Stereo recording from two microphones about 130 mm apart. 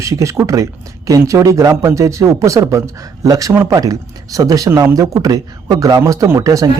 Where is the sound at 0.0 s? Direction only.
25° right (ahead or behind).